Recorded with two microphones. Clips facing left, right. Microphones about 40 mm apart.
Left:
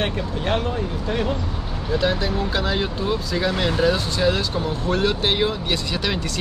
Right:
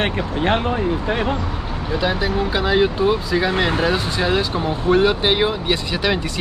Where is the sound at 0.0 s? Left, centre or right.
Right.